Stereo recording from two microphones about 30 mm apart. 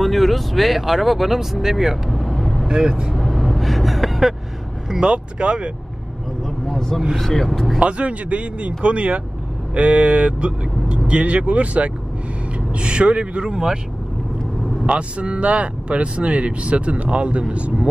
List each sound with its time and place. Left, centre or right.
0.0 s speech: centre
2.0 s vehicle: centre
2.7 s speech: right
3.2 s vehicle: centre
5.0 s speech: right
6.4 s speech: centre
7.8 s speech: right
11.1 s speech: right
12.5 s speech: right
14.9 s speech: right